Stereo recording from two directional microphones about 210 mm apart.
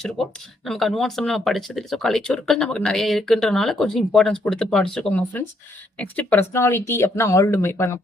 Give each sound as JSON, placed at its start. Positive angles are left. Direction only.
{"t": 0.0, "sound": "speech", "side_deg": 0}